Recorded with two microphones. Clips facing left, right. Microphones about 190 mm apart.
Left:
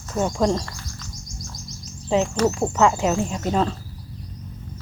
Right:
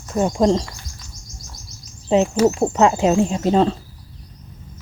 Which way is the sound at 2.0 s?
20° right (ahead or behind).